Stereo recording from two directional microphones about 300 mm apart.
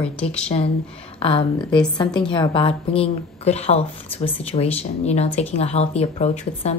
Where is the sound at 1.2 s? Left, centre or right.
Centre.